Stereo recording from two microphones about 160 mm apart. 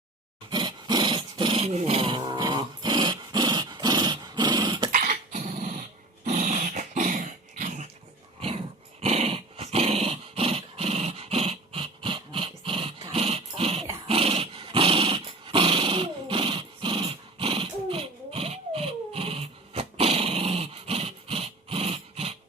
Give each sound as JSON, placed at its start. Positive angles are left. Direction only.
{"t": 0.5, "sound": "dog", "side_deg": -25}
{"t": 4.9, "sound": "dog", "side_deg": -55}
{"t": 8.4, "sound": "dog", "side_deg": -35}